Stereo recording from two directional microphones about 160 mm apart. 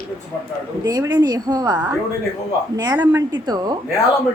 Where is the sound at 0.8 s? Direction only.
25° right (ahead or behind).